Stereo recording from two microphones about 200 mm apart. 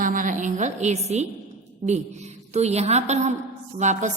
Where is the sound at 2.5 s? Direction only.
35° right (ahead or behind).